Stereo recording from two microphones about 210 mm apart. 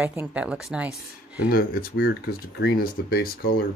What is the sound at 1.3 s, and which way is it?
Speech, 45° left (ahead or behind).